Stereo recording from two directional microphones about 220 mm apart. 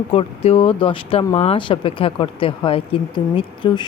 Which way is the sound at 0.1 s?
25° left (ahead or behind).